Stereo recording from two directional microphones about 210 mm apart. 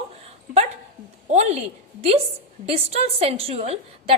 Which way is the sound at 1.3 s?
30° right (ahead or behind).